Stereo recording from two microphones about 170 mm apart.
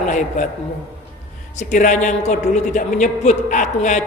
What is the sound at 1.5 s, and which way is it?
A man's voice, 45° left (ahead or behind).